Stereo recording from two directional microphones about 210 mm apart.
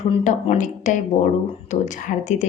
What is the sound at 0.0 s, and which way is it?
A woman's voice, 30° left (ahead or behind).